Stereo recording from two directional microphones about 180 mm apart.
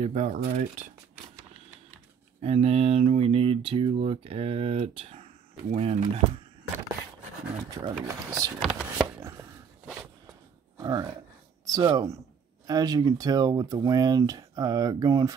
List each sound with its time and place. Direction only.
0.0 s speech: 40° right (ahead or behind)
2.4 s speech: 35° right (ahead or behind)
7.7 s speech: 20° right (ahead or behind)
8.7 s a sound: 5° right (ahead or behind)
10.8 s speech: 20° right (ahead or behind)